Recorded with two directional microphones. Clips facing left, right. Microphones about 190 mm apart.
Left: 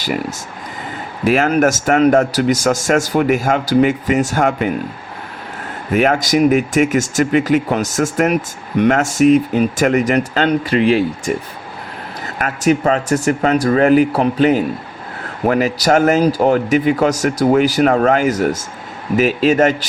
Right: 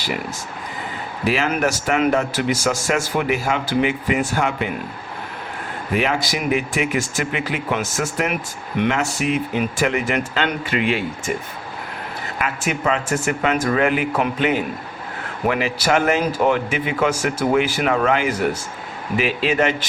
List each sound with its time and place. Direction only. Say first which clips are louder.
1.2 s speech: left 7 dB; 50° left (ahead or behind)
5.9 s speech: left 7 dB; 45° left (ahead or behind)
12.4 s speech: left 8 dB; 40° left (ahead or behind)